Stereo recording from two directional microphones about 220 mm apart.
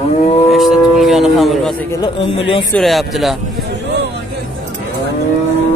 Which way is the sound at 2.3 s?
25° left (ahead or behind).